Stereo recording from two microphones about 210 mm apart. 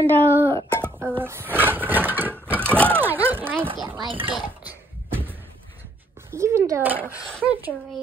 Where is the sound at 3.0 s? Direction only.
10° right (ahead or behind).